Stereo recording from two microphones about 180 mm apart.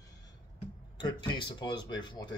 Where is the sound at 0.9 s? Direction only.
25° left (ahead or behind).